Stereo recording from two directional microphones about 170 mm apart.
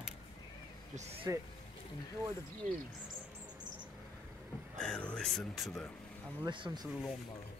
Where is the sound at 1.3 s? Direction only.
20° right (ahead or behind).